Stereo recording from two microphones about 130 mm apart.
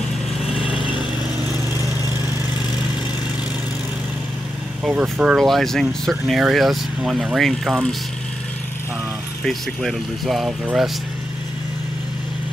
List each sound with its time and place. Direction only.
1.5 s vehicle: 20° right (ahead or behind)
4.8 s speech: centre (ahead or behind)
9.5 s speech: centre (ahead or behind)